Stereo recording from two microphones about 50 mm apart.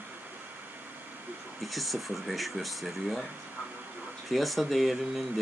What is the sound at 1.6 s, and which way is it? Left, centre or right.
Speech, centre.